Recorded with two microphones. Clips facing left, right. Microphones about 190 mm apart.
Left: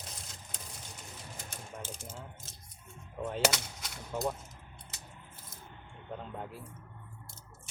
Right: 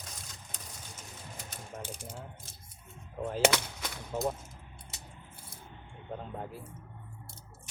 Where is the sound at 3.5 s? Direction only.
60° right (ahead or behind).